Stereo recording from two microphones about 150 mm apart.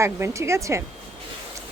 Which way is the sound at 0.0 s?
20° right (ahead or behind).